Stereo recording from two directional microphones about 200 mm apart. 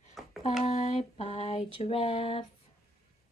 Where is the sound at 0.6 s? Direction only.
35° left (ahead or behind).